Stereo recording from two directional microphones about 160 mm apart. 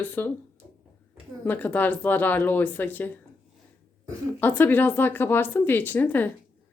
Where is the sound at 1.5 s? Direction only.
10° left (ahead or behind).